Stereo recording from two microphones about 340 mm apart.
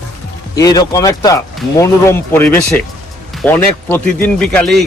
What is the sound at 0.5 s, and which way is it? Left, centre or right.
A man's voice, centre.